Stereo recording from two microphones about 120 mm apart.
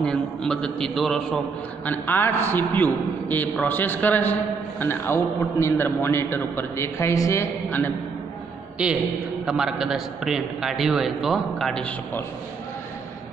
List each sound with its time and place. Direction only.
0.0 s a man's voice: 5° left (ahead or behind)
1.9 s a man's voice: 15° left (ahead or behind)
8.8 s a man's voice: 5° right (ahead or behind)